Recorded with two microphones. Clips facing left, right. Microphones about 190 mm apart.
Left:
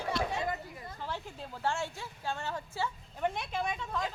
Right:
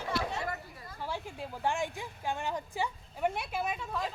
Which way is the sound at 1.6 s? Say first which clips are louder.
Right 1 dB; 15° right (ahead or behind).